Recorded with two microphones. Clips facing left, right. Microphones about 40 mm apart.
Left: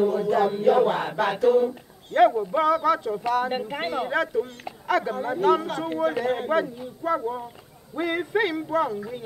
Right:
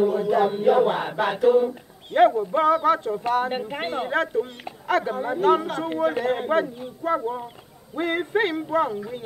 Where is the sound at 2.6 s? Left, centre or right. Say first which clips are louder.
Right 2 dB; centre.